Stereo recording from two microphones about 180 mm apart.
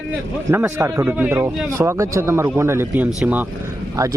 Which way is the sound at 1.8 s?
15° right (ahead or behind).